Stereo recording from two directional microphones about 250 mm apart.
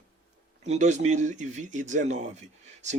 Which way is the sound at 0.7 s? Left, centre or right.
Right.